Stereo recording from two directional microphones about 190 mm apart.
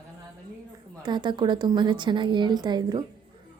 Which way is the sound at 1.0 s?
25° right (ahead or behind).